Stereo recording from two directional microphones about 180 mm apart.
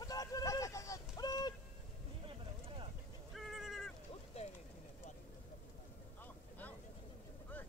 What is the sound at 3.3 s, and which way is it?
Fowl, centre (ahead or behind).